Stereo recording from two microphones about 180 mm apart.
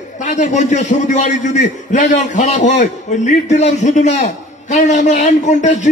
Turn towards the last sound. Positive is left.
turn(degrees=40)  # may be behind; listen again after turning